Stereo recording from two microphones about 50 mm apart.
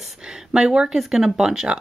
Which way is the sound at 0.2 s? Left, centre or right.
Centre.